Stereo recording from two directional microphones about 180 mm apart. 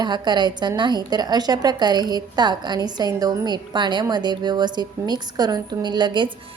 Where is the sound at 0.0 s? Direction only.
25° right (ahead or behind).